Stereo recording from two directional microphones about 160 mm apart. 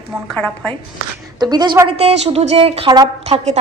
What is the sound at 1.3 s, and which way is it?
Speech, 25° right (ahead or behind).